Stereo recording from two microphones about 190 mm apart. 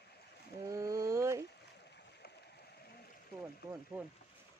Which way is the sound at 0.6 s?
15° right (ahead or behind).